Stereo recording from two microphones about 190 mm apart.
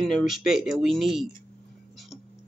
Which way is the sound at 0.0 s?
Centre (ahead or behind).